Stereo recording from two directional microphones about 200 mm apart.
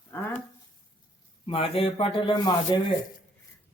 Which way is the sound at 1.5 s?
25° left (ahead or behind).